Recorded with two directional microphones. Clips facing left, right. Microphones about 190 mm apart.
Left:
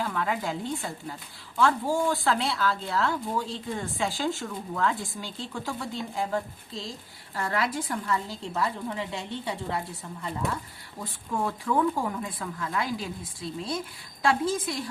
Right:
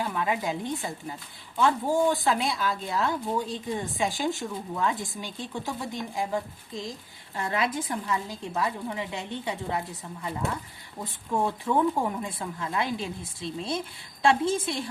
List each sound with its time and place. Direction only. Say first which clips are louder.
0.0 s speech: right 1 dB; 15° right (ahead or behind)
11.0 s a woman's voice: right 2 dB; 25° right (ahead or behind)